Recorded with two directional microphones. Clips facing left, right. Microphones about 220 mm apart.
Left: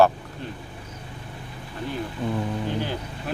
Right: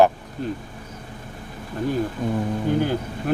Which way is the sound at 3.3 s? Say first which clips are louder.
Right 9 dB; 50° right (ahead or behind).